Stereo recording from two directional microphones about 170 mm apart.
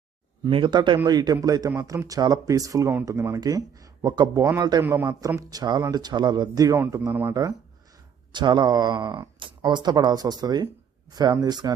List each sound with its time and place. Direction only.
0.4 s speech: 25° right (ahead or behind)
8.3 s speech: 25° right (ahead or behind)